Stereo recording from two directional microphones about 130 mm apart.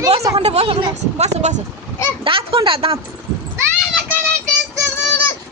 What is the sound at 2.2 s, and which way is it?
Speech, 45° right (ahead or behind).